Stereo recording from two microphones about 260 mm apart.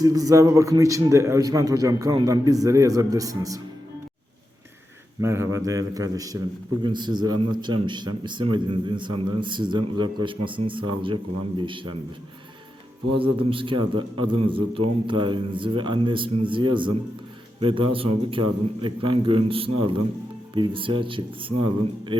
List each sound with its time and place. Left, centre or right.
0.0 s a man's voice: centre
5.2 s a man's voice: centre
13.1 s a man's voice: centre